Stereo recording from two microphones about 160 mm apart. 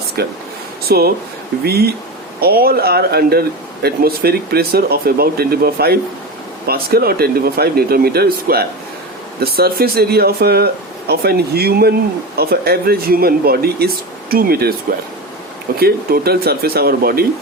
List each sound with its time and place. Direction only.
0.2 s speech: 75° right (ahead or behind)
2.4 s speech: 70° right (ahead or behind)